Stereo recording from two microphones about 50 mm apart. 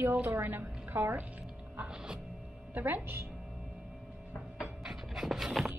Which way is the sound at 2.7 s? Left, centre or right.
Right.